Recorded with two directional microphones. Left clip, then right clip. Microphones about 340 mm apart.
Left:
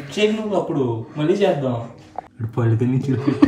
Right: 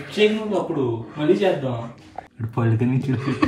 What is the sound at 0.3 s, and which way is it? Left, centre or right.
Speech, left.